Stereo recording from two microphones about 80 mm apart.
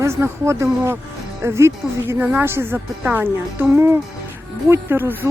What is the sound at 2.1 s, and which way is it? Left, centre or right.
A woman's voice, right.